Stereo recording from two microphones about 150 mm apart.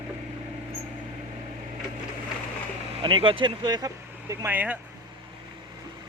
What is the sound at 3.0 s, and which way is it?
Speech, 35° right (ahead or behind).